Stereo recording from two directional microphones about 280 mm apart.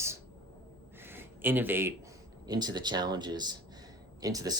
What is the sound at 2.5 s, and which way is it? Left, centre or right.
Speech, centre.